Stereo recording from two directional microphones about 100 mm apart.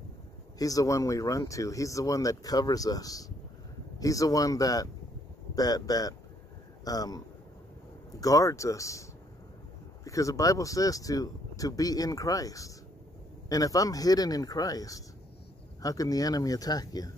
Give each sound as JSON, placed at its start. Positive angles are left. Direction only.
{"t": 0.6, "sound": "speech", "side_deg": 35}
{"t": 8.2, "sound": "speech", "side_deg": 35}
{"t": 10.0, "sound": "speech", "side_deg": 35}